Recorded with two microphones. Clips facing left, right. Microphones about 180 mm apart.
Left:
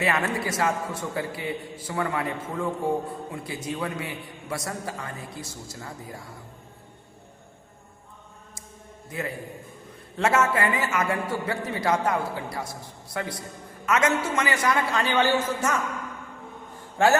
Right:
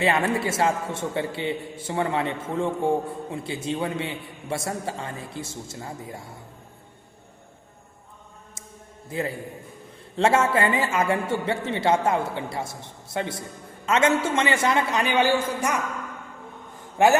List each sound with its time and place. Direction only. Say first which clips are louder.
0.0 s a man's voice: right 3 dB; 30° right (ahead or behind)
9.0 s a man's voice: right 4 dB; 30° right (ahead or behind); by 15.8 s 15° right (ahead or behind)
17.0 s a man's voice: right 2 dB; 15° right (ahead or behind)